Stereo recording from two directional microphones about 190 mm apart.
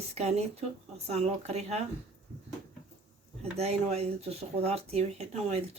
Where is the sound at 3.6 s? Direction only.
35° right (ahead or behind).